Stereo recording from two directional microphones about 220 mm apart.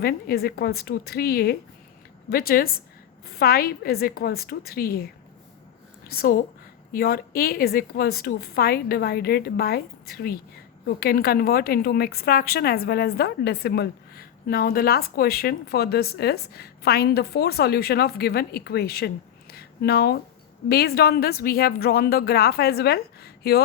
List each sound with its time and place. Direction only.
0.0 s a woman's voice: 45° left (ahead or behind)